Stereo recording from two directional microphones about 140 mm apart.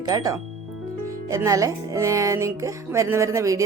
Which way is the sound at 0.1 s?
25° right (ahead or behind).